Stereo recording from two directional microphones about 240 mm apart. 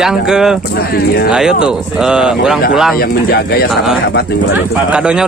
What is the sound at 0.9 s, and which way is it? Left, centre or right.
Speech, left.